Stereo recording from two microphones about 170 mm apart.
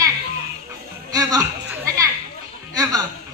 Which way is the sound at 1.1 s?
20° right (ahead or behind).